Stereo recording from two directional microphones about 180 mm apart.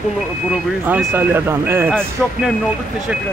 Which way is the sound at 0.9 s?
10° right (ahead or behind).